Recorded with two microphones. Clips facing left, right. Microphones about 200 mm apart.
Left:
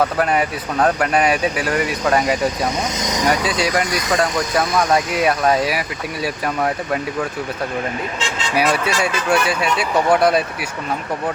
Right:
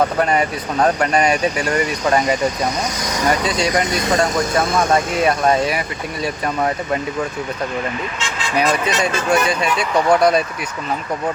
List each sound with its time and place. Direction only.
0.2 s speech: 5° left (ahead or behind)
3.0 s speech: 20° left (ahead or behind)
3.2 s speech: 5° left (ahead or behind)
3.8 s speech: 25° right (ahead or behind)
4.1 s speech: 5° left (ahead or behind)
4.6 s speech: 25° right (ahead or behind)
5.1 s speech: 5° left (ahead or behind)
8.5 s speech: 5° left (ahead or behind)